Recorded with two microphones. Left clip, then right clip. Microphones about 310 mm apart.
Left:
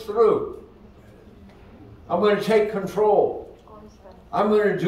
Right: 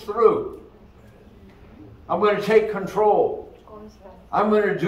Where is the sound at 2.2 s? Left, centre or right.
Centre.